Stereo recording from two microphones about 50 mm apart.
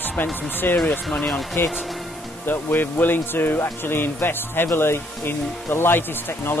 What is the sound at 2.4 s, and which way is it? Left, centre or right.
Speech, left.